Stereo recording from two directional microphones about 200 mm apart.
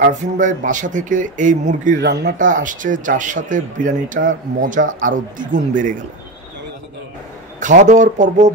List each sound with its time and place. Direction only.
0.0 s speech: 40° right (ahead or behind)
2.0 s speech: 55° right (ahead or behind)
2.3 s speech: 40° right (ahead or behind)
7.6 s speech: 40° right (ahead or behind)